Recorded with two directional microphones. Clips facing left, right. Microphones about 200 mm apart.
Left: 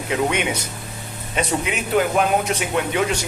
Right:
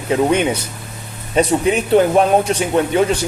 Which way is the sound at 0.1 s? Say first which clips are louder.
Right 7 dB; 35° right (ahead or behind).